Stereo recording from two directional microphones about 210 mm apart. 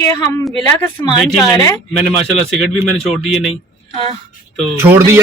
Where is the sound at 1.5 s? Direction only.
15° left (ahead or behind).